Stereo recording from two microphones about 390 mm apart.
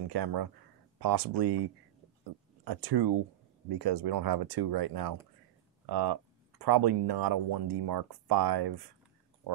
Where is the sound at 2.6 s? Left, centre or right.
Right.